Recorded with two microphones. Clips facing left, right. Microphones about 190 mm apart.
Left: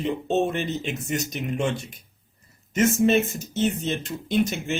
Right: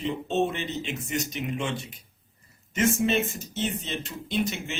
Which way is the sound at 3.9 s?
45° left (ahead or behind).